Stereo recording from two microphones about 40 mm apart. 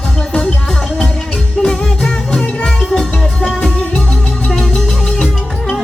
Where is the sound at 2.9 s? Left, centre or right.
Left.